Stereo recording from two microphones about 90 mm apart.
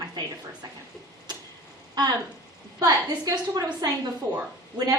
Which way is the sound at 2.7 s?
45° right (ahead or behind).